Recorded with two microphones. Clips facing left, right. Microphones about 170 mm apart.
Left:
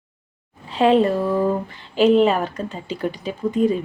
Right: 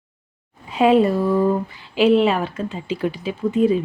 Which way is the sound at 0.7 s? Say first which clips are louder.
Right 1 dB; 10° right (ahead or behind).